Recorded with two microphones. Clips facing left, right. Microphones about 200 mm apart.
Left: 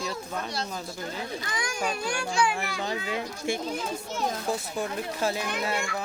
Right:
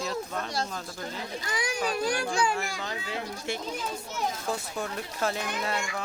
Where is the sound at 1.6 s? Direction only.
35° right (ahead or behind).